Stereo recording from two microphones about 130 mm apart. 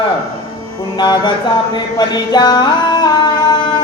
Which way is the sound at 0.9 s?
35° left (ahead or behind).